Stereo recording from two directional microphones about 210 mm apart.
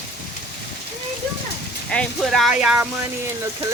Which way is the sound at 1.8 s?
5° left (ahead or behind).